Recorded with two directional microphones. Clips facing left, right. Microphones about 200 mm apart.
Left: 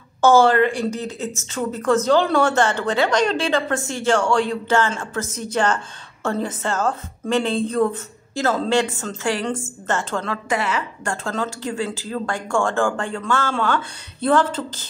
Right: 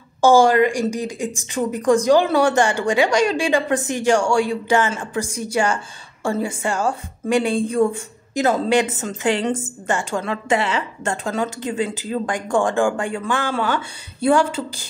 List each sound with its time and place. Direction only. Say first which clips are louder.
0.2 s a woman's voice: right 1 dB; 15° right (ahead or behind)
10.5 s a woman's voice: right 3 dB; 25° right (ahead or behind)
11.2 s a woman's voice: right 1 dB; 15° right (ahead or behind)